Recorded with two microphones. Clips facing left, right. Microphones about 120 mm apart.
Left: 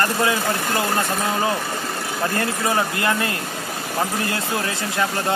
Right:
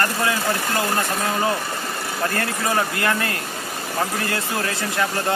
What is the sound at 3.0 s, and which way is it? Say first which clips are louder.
Speech: left 1 dB; 20° left (ahead or behind).